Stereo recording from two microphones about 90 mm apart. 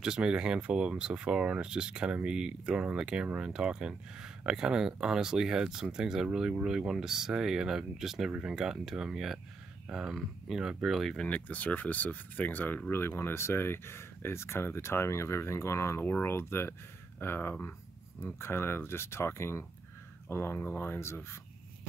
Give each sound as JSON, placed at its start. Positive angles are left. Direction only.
{"t": 0.0, "sound": "speech", "side_deg": -10}
{"t": 11.2, "sound": "speech", "side_deg": 15}